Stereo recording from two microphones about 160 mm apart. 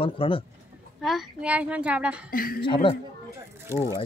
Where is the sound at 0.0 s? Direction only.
35° left (ahead or behind).